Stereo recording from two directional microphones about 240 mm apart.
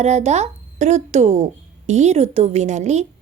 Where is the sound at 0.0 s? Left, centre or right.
Right.